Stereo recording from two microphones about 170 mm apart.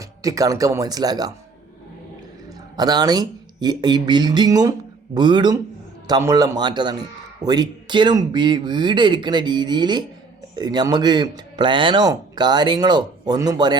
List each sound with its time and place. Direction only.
0.0 s speech: 20° right (ahead or behind)
2.7 s speech: 25° right (ahead or behind)